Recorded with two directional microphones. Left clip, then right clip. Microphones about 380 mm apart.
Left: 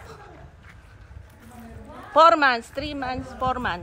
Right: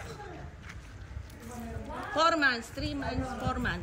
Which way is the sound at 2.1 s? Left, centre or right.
Centre.